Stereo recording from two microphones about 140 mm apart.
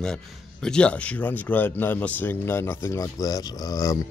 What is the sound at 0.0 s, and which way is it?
A man's voice, 5° left (ahead or behind).